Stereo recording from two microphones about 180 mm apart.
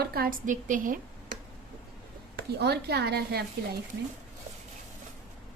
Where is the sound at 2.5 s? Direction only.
65° right (ahead or behind).